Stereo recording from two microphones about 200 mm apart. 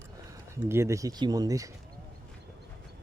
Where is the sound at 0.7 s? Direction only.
15° right (ahead or behind).